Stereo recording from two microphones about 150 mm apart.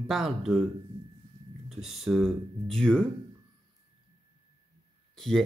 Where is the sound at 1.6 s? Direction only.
Centre (ahead or behind).